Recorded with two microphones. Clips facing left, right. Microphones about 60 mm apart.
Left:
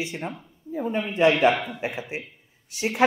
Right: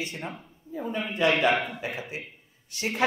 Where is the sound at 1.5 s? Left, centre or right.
Right.